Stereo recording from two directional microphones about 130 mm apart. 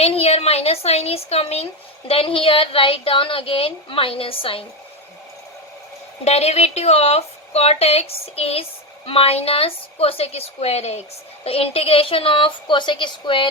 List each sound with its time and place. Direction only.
0.0 s a woman's voice: 50° left (ahead or behind)
6.2 s a woman's voice: 55° left (ahead or behind); by 13.5 s 40° left (ahead or behind)